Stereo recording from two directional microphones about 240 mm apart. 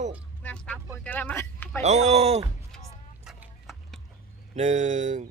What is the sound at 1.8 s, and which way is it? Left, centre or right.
Speech, right.